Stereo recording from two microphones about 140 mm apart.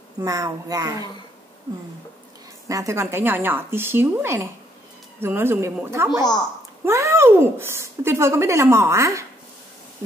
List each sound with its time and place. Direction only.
0.2 s speech: 25° right (ahead or behind)
2.7 s a woman's voice: 20° right (ahead or behind)